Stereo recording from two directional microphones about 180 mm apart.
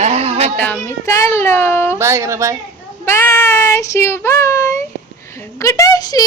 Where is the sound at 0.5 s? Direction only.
10° left (ahead or behind).